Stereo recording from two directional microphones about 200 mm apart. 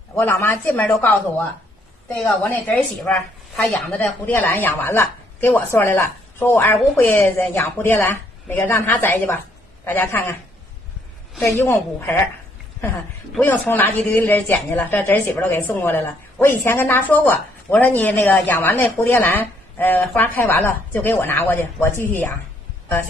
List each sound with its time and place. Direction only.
0.1 s a woman's voice: 10° left (ahead or behind)
11.4 s a woman's voice: 15° left (ahead or behind)
13.3 s a woman's voice: 10° left (ahead or behind)